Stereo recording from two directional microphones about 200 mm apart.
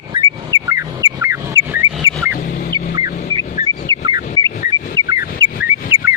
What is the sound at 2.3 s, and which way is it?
Vehicle, 40° left (ahead or behind).